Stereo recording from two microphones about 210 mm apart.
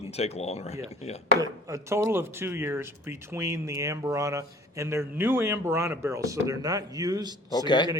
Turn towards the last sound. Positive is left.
turn(degrees=20)  # may be behind; listen again after turning